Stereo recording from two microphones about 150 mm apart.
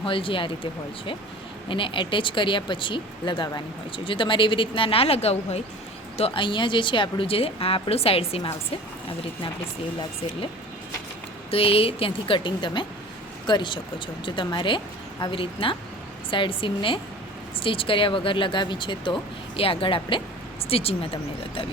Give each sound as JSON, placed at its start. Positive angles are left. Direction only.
{"t": 0.0, "sound": "speech", "side_deg": 35}
{"t": 11.5, "sound": "speech", "side_deg": 40}